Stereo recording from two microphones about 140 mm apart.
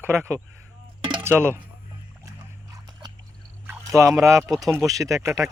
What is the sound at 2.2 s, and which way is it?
Dog, 25° right (ahead or behind).